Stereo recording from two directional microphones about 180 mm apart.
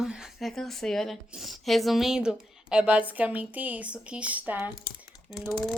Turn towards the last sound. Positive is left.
turn(degrees=0)  # may be behind; listen again after turning